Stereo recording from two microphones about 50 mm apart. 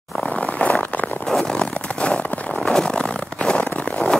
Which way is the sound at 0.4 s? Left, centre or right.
Left.